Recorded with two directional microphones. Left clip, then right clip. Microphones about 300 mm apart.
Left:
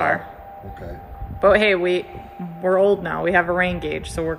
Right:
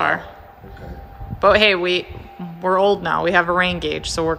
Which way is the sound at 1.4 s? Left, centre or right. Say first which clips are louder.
Right 2 dB; centre.